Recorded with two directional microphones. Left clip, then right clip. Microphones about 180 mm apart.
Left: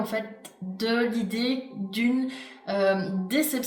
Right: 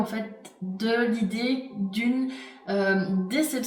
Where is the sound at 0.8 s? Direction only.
45° left (ahead or behind).